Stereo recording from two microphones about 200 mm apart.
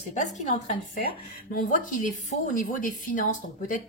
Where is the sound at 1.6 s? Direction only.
40° left (ahead or behind).